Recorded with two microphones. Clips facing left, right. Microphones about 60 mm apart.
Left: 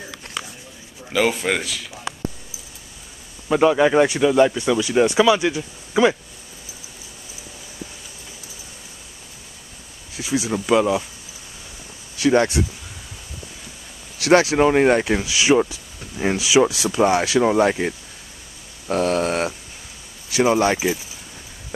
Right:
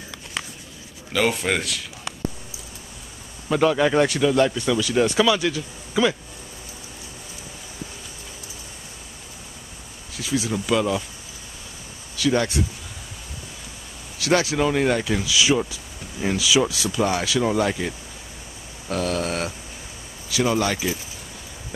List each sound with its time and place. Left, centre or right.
1.1 s speech: centre
3.4 s speech: centre
10.2 s speech: centre
12.2 s speech: left
14.1 s speech: left
18.9 s a sound: left
20.2 s speech: left